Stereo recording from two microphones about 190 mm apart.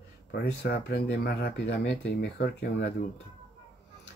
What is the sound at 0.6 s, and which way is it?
Speech, 60° left (ahead or behind).